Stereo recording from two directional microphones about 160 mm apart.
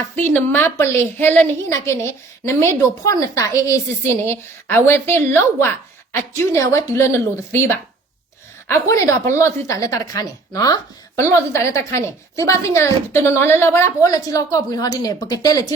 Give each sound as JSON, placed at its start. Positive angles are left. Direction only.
{"t": 0.3, "sound": "a woman's voice", "side_deg": 15}